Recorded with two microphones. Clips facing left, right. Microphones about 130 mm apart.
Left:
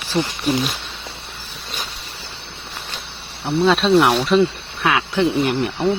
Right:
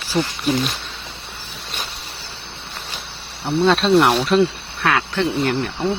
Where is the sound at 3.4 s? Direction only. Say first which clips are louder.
Even; centre (ahead or behind).